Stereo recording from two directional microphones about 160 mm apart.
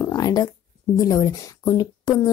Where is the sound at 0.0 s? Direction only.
25° left (ahead or behind).